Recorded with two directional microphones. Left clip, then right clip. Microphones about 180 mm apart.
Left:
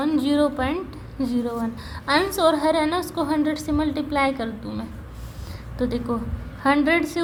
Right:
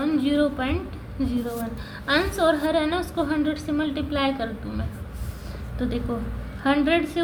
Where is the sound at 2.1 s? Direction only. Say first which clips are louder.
Left 2 dB; 40° left (ahead or behind).